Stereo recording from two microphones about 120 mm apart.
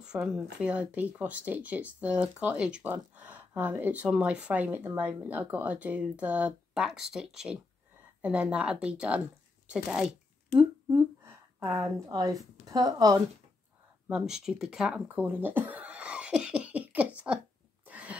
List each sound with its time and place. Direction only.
0.0 s speech: 5° right (ahead or behind)
9.7 s shuffling cards: 5° right (ahead or behind)
11.6 s a woman's voice: 20° right (ahead or behind)
12.1 s a woman's voice: 30° right (ahead or behind)
14.0 s speech: 5° right (ahead or behind)
17.8 s a sound: 10° right (ahead or behind)